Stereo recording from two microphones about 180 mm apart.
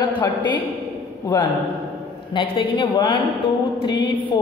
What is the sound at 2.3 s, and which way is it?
Speech, 30° left (ahead or behind).